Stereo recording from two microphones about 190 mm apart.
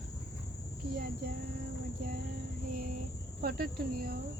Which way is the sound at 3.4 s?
55° right (ahead or behind).